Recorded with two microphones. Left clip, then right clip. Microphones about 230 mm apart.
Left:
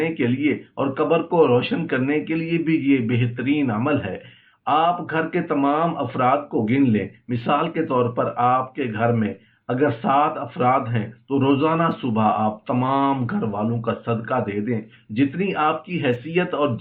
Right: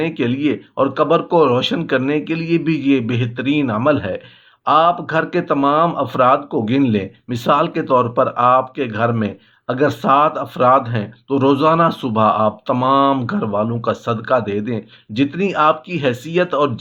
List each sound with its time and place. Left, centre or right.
0.0 s speech: right